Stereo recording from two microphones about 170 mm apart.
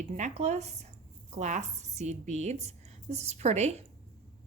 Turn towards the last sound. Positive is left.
turn(degrees=-40)  # may be behind; listen again after turning